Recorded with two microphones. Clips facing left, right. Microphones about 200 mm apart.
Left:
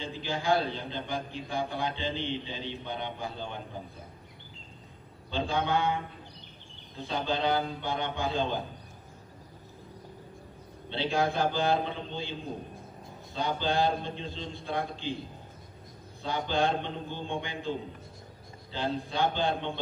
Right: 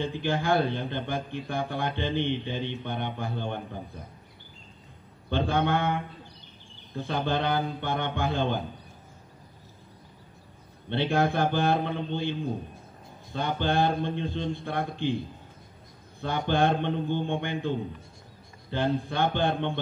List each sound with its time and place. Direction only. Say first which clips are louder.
0.0 s a man's voice: right 5 dB; 55° right (ahead or behind)
5.3 s a man's voice: right 3 dB; 55° right (ahead or behind)
7.1 s a man's voice: right 1 dB; 55° right (ahead or behind)
10.9 s a man's voice: right 3 dB; 55° right (ahead or behind)
16.2 s a man's voice: right 3 dB; 55° right (ahead or behind)